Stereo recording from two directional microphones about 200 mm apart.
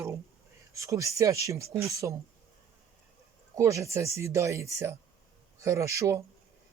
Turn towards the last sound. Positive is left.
turn(degrees=-15)  # may be behind; listen again after turning